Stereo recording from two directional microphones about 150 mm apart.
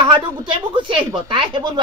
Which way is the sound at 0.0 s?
35° right (ahead or behind).